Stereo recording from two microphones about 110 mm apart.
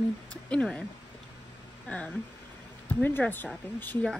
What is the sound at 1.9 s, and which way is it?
Speech, 15° left (ahead or behind).